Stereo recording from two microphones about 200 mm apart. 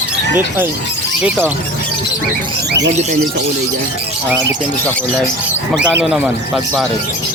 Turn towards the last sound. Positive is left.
turn(degrees=0)  # may be behind; listen again after turning